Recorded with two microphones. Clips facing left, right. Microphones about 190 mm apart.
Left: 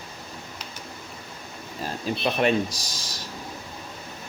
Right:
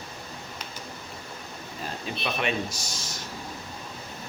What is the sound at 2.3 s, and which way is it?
Speech, 35° left (ahead or behind).